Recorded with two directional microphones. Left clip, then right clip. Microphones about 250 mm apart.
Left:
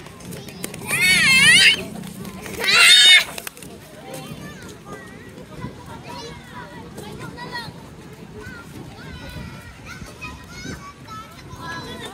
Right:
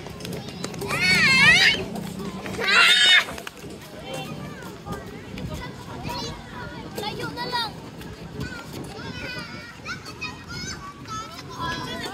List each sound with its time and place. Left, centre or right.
0.6 s a sound: left
6.0 s children playing: right
10.6 s children playing: right